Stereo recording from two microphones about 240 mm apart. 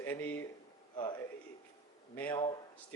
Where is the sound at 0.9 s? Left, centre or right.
Centre.